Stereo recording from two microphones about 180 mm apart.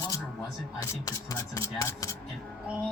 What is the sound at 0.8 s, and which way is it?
Speech, 15° left (ahead or behind).